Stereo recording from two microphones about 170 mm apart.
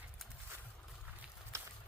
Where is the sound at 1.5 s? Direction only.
15° right (ahead or behind).